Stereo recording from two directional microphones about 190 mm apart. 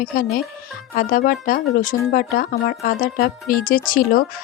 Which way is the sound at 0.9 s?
50° left (ahead or behind).